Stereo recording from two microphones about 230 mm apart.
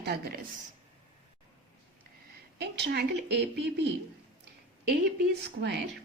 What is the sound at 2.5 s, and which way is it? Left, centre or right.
A woman's voice, right.